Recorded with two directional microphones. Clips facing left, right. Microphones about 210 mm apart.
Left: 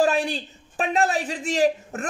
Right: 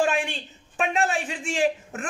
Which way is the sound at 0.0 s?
35° left (ahead or behind).